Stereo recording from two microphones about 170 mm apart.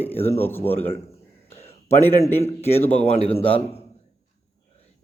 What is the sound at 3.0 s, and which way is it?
Speech, 40° left (ahead or behind).